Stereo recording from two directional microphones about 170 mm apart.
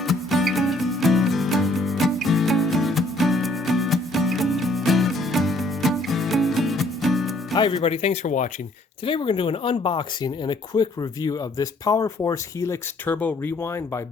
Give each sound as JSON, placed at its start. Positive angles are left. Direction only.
{"t": 0.0, "sound": "music", "side_deg": 0}
{"t": 7.5, "sound": "speech", "side_deg": 25}
{"t": 9.0, "sound": "speech", "side_deg": 30}